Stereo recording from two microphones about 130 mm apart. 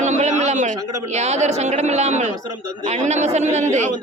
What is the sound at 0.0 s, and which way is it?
Speech, 65° right (ahead or behind).